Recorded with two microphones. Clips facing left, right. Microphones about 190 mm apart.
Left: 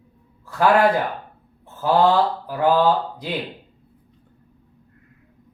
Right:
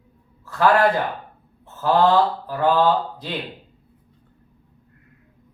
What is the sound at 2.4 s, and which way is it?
Mantra, 15° left (ahead or behind).